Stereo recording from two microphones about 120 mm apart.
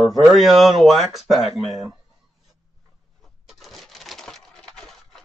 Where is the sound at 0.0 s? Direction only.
Centre (ahead or behind).